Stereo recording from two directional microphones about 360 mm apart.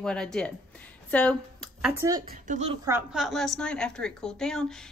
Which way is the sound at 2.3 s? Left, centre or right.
Centre.